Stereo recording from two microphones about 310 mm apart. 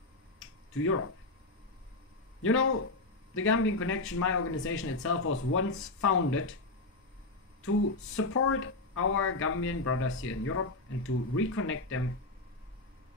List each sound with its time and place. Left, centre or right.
0.7 s speech: left
2.4 s speech: left
8.2 s speech: left